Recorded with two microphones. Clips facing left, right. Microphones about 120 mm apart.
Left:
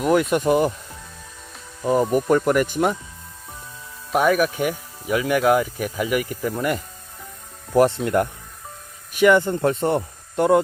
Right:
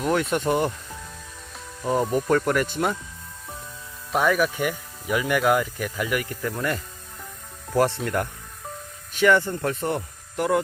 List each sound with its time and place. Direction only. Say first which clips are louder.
0.0 s speech: left 4 dB; 10° left (ahead or behind)
1.8 s speech: left 4 dB; 10° left (ahead or behind)
4.1 s speech: left 3 dB; 10° left (ahead or behind)
7.7 s speech: left 5 dB; 20° left (ahead or behind)